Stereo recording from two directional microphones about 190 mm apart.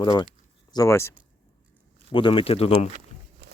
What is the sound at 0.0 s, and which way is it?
Speech, 25° left (ahead or behind).